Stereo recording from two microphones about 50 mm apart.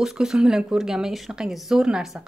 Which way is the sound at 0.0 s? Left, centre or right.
Centre.